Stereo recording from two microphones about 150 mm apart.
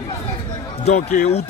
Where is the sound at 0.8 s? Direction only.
45° left (ahead or behind).